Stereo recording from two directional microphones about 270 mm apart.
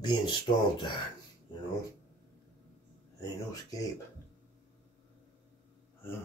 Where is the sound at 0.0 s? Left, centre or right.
Centre.